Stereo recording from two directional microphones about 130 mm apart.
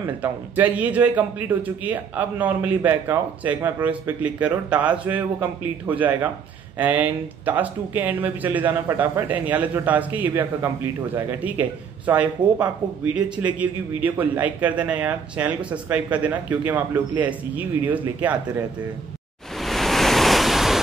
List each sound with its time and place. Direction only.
0.0 s a man's voice: 15° right (ahead or behind)
19.5 s waves: centre (ahead or behind)